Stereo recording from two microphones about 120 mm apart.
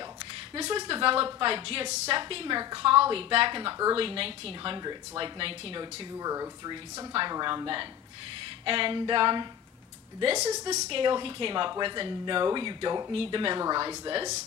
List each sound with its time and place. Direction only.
0.6 s a woman's voice: 45° right (ahead or behind)
4.7 s a woman's voice: 40° right (ahead or behind)
6.1 s a woman's voice: 30° right (ahead or behind)
10.3 s a woman's voice: 30° right (ahead or behind)
10.9 s speech: 45° right (ahead or behind)
13.1 s speech: 50° right (ahead or behind)